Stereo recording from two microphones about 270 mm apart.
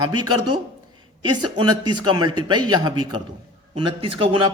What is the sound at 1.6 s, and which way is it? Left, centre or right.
Speech, right.